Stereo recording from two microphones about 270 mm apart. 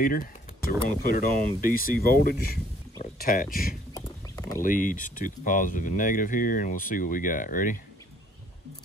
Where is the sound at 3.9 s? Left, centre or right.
Centre.